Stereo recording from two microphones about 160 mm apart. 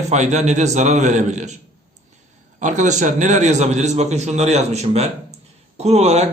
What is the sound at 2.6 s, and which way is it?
Speech, 50° right (ahead or behind).